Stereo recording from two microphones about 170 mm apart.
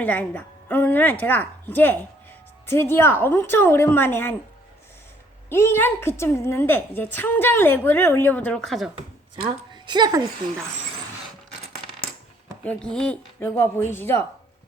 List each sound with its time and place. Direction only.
0.0 s a woman's voice: 10° left (ahead or behind)
5.5 s a woman's voice: 15° left (ahead or behind)
9.7 s a woman's voice: 25° right (ahead or behind)
12.6 s a woman's voice: 5° left (ahead or behind)